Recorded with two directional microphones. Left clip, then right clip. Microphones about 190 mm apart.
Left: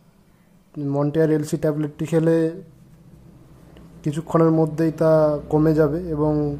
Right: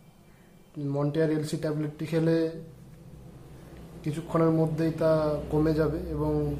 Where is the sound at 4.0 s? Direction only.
35° left (ahead or behind).